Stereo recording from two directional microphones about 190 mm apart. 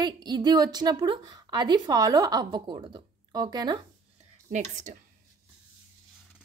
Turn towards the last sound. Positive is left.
turn(degrees=-40)  # may be behind; listen again after turning